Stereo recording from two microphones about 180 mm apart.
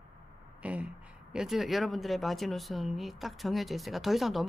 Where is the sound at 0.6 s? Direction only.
5° right (ahead or behind).